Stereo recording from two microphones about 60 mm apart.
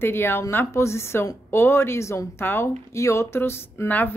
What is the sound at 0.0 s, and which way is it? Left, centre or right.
A woman's voice, left.